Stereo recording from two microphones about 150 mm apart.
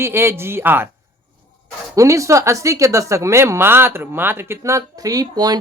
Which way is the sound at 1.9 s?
20° right (ahead or behind).